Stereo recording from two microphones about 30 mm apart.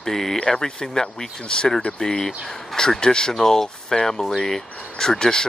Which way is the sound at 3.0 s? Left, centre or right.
Left.